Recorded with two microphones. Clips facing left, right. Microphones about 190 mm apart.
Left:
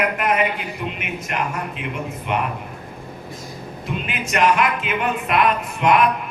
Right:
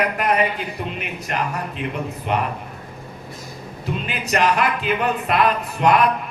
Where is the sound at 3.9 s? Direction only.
35° right (ahead or behind).